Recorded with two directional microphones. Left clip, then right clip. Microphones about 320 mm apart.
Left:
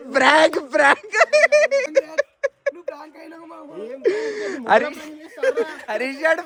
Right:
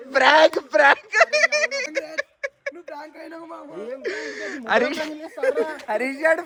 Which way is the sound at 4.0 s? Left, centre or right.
Centre.